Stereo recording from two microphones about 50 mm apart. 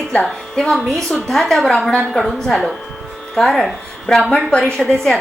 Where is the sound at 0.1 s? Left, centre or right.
Centre.